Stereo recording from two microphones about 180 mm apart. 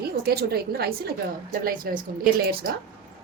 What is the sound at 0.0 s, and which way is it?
A woman's voice, 60° right (ahead or behind).